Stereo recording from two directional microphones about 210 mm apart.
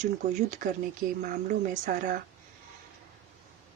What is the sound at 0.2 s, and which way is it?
Speech, 35° right (ahead or behind).